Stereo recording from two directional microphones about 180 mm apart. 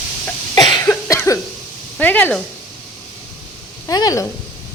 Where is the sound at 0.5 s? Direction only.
20° left (ahead or behind).